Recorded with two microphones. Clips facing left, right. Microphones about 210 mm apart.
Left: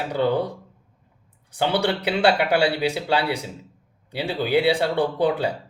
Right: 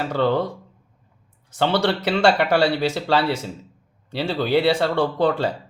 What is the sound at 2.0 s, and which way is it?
Speech, 15° left (ahead or behind).